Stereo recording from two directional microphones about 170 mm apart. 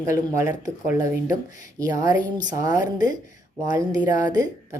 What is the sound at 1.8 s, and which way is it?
Speech, 20° right (ahead or behind).